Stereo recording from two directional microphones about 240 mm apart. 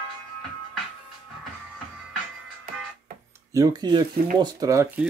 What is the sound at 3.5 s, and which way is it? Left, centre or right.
Speech, centre.